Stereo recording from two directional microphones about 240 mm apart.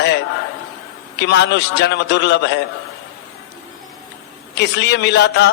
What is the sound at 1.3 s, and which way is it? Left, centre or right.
A man's voice, left.